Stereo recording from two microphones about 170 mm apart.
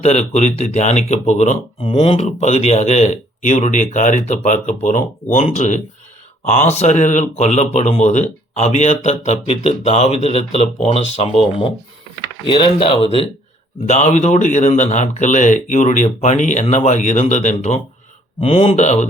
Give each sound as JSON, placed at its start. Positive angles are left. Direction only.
{"t": 0.0, "sound": "speech", "side_deg": 40}